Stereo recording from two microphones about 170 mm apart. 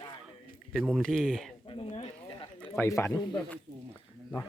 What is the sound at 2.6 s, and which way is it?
Speech, 15° left (ahead or behind).